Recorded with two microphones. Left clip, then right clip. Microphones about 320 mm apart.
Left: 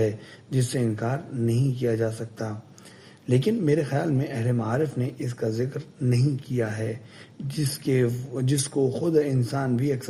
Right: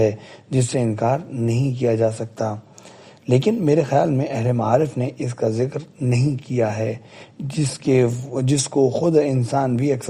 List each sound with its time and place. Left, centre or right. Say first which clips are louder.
0.5 s a man's voice: right 6 dB; right